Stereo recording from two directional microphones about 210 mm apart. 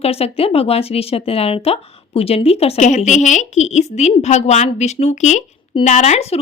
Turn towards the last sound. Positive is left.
turn(degrees=30)  # may be behind; listen again after turning